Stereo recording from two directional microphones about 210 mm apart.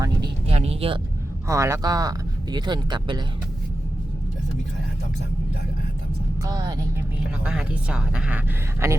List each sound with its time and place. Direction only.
0.4 s a sound: 30° right (ahead or behind)
1.5 s speech: 15° right (ahead or behind)
6.4 s speech: 15° right (ahead or behind)
7.4 s speech: 5° right (ahead or behind)